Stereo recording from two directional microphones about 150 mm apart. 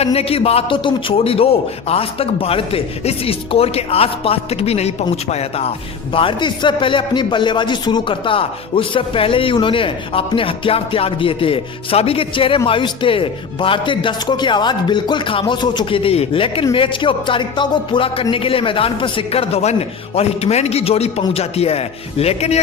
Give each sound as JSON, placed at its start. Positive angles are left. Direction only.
{"t": 0.0, "sound": "a man's voice", "side_deg": 45}
{"t": 6.1, "sound": "a man's voice", "side_deg": 35}